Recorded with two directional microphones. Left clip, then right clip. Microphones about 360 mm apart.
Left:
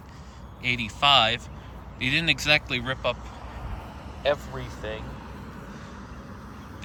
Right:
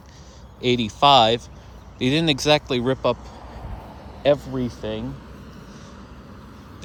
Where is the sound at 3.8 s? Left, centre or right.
Right.